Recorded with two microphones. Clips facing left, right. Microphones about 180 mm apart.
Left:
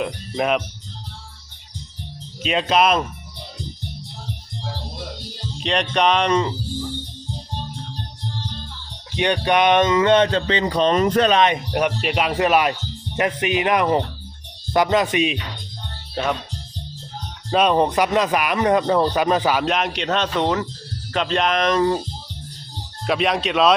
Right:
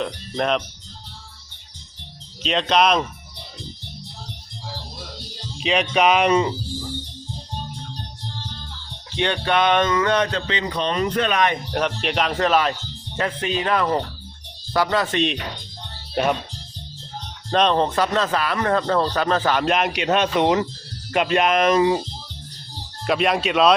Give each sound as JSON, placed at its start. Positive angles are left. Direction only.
{"t": 0.0, "sound": "speech", "side_deg": 5}
{"t": 2.4, "sound": "speech", "side_deg": 5}
{"t": 5.5, "sound": "speech", "side_deg": -5}
{"t": 9.1, "sound": "speech", "side_deg": 15}
{"t": 11.3, "sound": "speech", "side_deg": 25}
{"t": 11.7, "sound": "speech", "side_deg": 10}
{"t": 17.5, "sound": "speech", "side_deg": 10}
{"t": 19.6, "sound": "a man's voice", "side_deg": 0}
{"t": 23.0, "sound": "speech", "side_deg": 0}